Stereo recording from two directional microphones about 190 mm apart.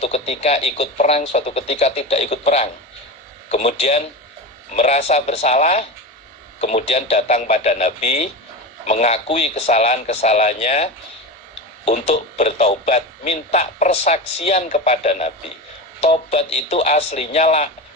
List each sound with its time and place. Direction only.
0.0 s speech: 35° left (ahead or behind)
11.9 s speech: 35° left (ahead or behind)